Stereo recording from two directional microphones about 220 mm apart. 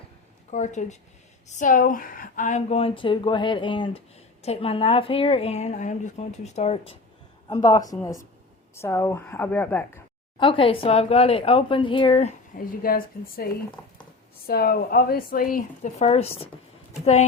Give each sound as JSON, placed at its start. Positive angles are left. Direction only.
{"t": 0.5, "sound": "a woman's voice", "side_deg": 35}
{"t": 7.4, "sound": "a woman's voice", "side_deg": 15}
{"t": 10.3, "sound": "a woman's voice", "side_deg": 25}
{"t": 12.5, "sound": "a woman's voice", "side_deg": 40}
{"t": 15.5, "sound": "a woman's voice", "side_deg": 30}